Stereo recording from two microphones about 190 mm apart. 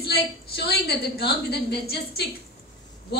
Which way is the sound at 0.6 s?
60° left (ahead or behind).